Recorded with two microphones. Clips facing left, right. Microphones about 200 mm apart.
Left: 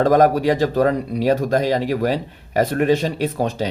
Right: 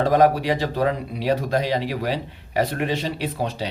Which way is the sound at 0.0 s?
45° left (ahead or behind).